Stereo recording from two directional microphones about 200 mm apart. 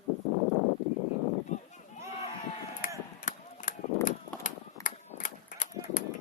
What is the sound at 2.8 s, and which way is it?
Chop, 45° left (ahead or behind).